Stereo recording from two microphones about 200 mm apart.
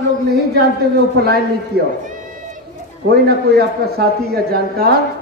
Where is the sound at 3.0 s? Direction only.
50° right (ahead or behind).